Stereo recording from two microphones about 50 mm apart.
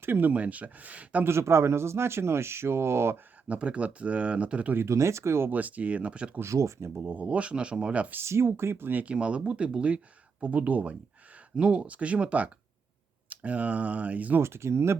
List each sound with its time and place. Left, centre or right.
0.0 s speech: right
0.3 s speech: right
1.2 s speech: right
3.5 s speech: right
4.9 s speech: right
5.5 s speech: right
6.4 s speech: right
7.2 s speech: right
8.2 s speech: right
9.0 s speech: right
14.4 s speech: right